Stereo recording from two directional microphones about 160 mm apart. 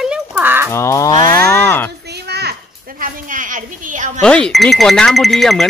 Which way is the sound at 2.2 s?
90° right.